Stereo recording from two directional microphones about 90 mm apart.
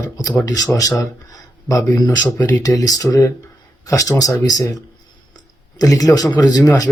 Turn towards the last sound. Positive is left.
turn(degrees=45)  # may be behind; listen again after turning